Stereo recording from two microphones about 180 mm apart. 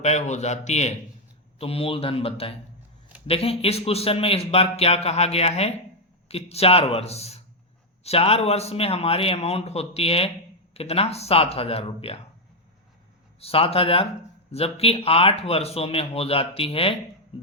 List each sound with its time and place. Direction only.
0.0 s speech: 40° left (ahead or behind)
13.4 s speech: 35° left (ahead or behind)
17.3 s music: 30° left (ahead or behind)